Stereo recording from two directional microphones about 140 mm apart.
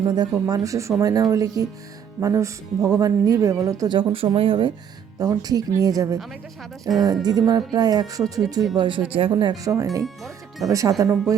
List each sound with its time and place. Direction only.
0.0 s speech: 30° right (ahead or behind)
5.2 s speech: 25° right (ahead or behind)